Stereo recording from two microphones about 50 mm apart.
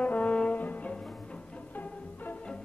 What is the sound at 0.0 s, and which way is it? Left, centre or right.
Brass instrument, left.